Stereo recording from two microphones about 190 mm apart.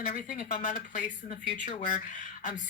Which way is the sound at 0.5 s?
35° left (ahead or behind).